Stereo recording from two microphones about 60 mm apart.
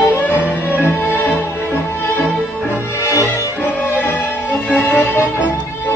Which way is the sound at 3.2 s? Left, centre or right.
Left.